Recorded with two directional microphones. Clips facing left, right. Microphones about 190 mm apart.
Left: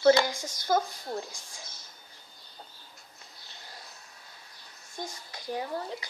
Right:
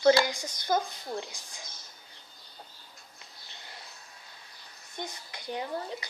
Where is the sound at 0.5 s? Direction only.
20° right (ahead or behind).